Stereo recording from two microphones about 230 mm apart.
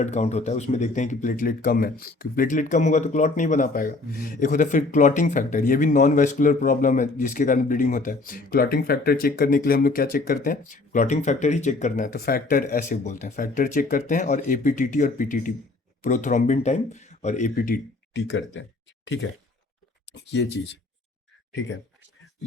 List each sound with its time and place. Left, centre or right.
0.0 s speech: left